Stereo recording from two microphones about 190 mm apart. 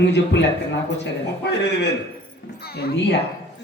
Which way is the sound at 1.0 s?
65° left (ahead or behind).